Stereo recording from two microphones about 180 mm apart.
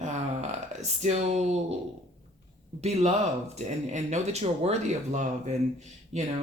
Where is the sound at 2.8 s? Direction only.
35° right (ahead or behind).